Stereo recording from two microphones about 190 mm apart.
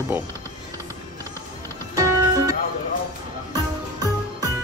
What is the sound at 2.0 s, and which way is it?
Music, 20° right (ahead or behind).